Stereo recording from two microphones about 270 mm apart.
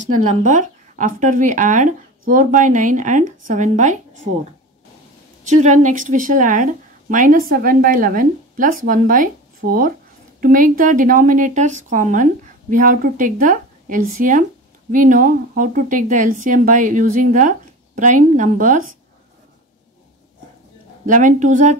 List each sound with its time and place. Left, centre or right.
0.0 s speech: right
5.5 s speech: right
21.0 s speech: right